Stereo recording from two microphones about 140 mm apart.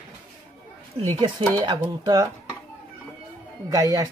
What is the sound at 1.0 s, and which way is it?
Speech, 35° right (ahead or behind).